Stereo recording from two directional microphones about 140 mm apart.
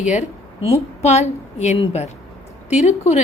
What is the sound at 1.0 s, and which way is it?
A woman's voice, 50° left (ahead or behind).